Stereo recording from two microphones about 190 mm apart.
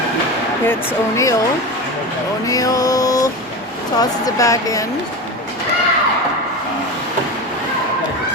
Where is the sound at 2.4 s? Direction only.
20° left (ahead or behind).